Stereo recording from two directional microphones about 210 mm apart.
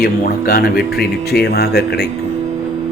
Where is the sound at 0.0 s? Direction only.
45° left (ahead or behind).